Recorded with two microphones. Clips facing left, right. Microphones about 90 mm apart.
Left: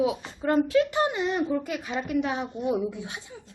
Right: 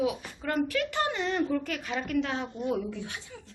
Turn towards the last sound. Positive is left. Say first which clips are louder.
# left 4 dB
turn(degrees=15)  # may be behind; listen again after turning